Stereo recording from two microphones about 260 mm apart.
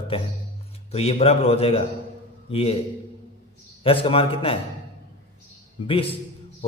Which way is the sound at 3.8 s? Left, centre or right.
Left.